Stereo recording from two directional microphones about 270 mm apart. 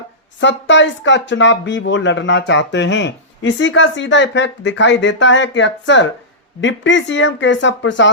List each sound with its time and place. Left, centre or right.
0.3 s speech: left